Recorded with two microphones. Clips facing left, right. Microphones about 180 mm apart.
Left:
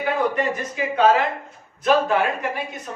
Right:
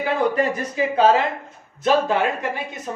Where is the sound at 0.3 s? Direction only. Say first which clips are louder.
Right 3 dB; 35° right (ahead or behind).